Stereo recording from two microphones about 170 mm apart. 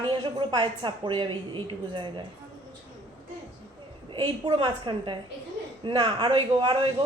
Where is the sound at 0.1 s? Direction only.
25° right (ahead or behind).